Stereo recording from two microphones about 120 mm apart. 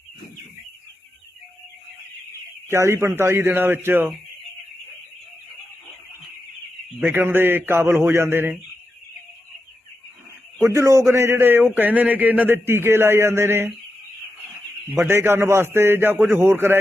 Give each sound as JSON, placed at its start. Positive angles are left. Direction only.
{"t": 2.6, "sound": "a man's voice", "side_deg": -20}
{"t": 7.0, "sound": "a man's voice", "side_deg": -15}
{"t": 10.6, "sound": "a man's voice", "side_deg": -20}
{"t": 14.9, "sound": "a man's voice", "side_deg": -20}